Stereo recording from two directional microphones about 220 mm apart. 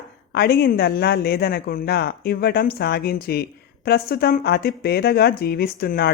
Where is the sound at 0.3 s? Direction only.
45° left (ahead or behind).